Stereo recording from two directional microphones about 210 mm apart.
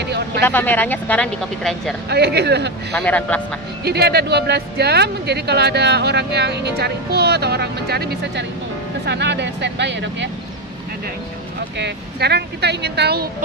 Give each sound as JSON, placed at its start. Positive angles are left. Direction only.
{"t": 0.5, "sound": "speech", "side_deg": 10}
{"t": 2.0, "sound": "speech", "side_deg": -50}
{"t": 2.9, "sound": "speech", "side_deg": 5}
{"t": 3.8, "sound": "speech", "side_deg": -50}
{"t": 11.8, "sound": "speech", "side_deg": -50}